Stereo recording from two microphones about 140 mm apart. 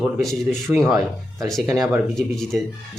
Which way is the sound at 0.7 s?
10° right (ahead or behind).